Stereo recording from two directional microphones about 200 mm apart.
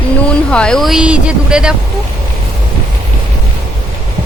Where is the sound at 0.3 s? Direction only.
5° left (ahead or behind).